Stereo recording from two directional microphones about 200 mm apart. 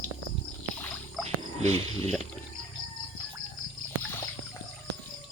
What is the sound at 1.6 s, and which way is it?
Speech, 30° right (ahead or behind).